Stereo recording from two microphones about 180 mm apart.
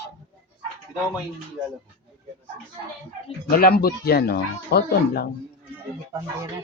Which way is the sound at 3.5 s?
55° left (ahead or behind).